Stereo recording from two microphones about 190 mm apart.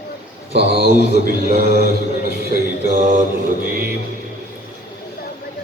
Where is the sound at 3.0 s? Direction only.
40° right (ahead or behind).